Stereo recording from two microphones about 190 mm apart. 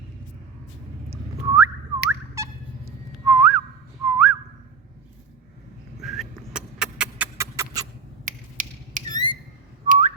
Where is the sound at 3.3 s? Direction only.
5° right (ahead or behind).